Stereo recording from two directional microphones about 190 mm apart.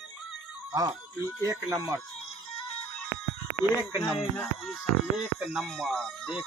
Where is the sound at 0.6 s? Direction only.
15° right (ahead or behind).